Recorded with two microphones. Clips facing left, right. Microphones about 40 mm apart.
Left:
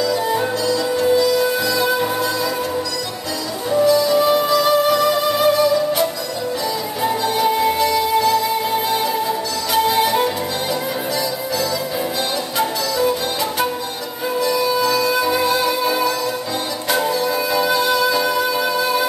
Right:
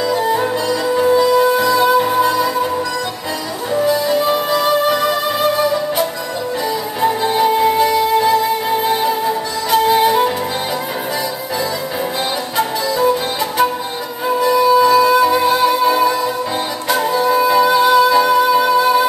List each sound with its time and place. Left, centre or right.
0.2 s music: centre
3.7 s music: centre
4.2 s music: centre
7.0 s music: centre
12.5 s music: centre
14.3 s music: centre